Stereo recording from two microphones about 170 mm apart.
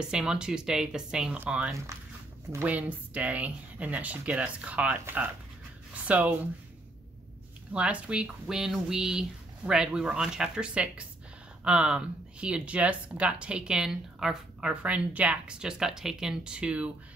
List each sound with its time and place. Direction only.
0.1 s speech: 5° right (ahead or behind)
7.7 s speech: 5° right (ahead or behind)